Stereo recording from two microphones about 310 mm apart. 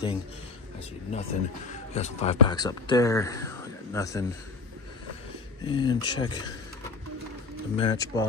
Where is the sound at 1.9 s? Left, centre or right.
Left.